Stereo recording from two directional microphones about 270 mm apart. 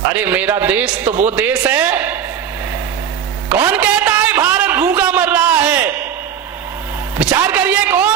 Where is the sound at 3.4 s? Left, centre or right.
Centre.